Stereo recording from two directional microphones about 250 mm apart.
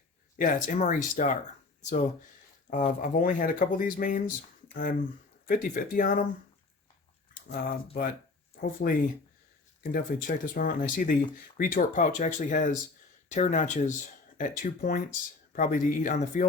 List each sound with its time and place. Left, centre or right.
0.3 s speech: left
7.5 s speech: left
8.8 s speech: left